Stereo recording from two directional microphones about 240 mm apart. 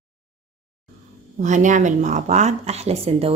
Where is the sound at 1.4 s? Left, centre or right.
Right.